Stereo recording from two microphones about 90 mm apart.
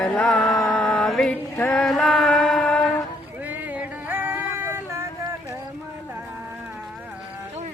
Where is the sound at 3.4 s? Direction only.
20° right (ahead or behind).